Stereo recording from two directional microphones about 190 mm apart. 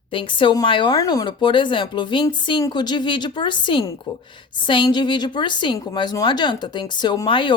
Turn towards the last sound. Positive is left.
turn(degrees=25)  # may be behind; listen again after turning